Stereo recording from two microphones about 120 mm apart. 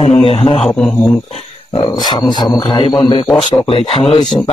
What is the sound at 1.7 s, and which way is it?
Speech, 35° left (ahead or behind).